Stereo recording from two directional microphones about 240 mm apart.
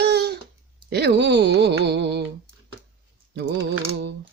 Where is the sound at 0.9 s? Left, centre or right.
Right.